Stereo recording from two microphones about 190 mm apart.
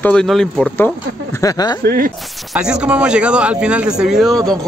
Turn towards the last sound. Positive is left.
turn(degrees=0)  # may be behind; listen again after turning